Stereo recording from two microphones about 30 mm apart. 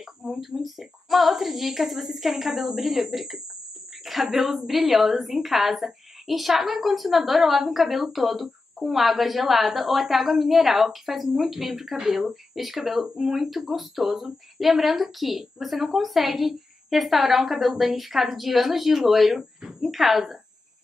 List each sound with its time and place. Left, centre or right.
0.0 s a sound: centre
0.6 s a woman's voice: centre
11.2 s a woman's voice: centre